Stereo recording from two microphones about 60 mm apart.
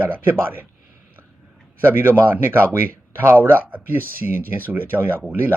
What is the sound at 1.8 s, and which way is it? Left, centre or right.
Speech, right.